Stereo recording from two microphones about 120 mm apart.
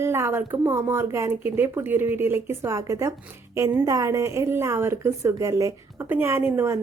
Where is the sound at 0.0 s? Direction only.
20° right (ahead or behind).